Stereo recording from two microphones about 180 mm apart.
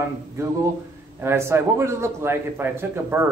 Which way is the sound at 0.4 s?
15° right (ahead or behind).